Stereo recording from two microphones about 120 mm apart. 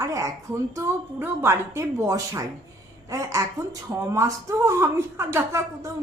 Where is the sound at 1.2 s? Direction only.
20° right (ahead or behind).